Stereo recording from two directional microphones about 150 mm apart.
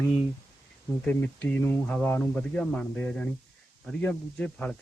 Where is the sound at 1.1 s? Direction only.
10° left (ahead or behind).